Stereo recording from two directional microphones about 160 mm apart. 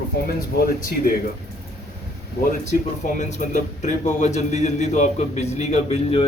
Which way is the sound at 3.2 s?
50° left (ahead or behind).